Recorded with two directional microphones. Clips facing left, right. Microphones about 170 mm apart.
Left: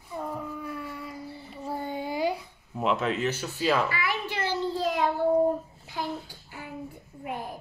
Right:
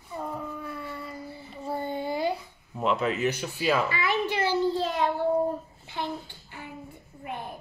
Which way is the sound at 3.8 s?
20° right (ahead or behind).